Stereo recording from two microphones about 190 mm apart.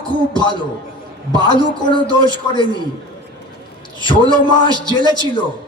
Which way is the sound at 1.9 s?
25° left (ahead or behind).